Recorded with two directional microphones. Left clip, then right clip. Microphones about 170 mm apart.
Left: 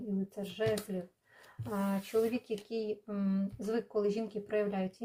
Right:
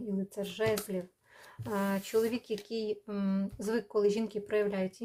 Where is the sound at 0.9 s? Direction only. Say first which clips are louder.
Right 3 dB; 30° right (ahead or behind).